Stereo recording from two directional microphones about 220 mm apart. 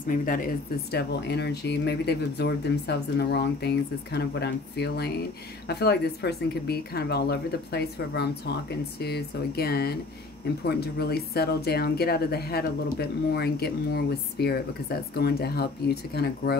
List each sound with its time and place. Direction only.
0.0 s speech: 40° left (ahead or behind)
0.9 s speech: 50° left (ahead or behind)